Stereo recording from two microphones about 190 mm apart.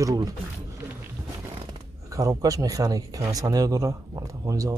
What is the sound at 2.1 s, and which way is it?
Speech, 20° right (ahead or behind).